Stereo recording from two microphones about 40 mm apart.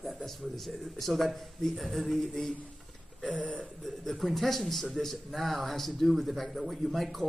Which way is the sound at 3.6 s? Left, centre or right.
Centre.